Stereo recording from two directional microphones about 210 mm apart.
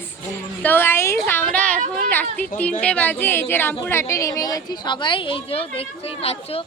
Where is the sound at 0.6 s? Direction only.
10° left (ahead or behind).